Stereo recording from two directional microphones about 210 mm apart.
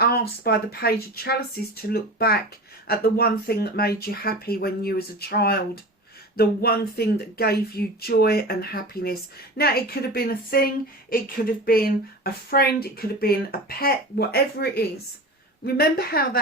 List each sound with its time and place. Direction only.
0.0 s speech: 50° left (ahead or behind)